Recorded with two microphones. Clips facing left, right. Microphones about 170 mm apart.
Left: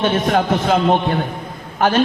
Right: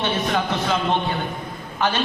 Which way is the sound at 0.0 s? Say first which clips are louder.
Left 6 dB; 50° left (ahead or behind).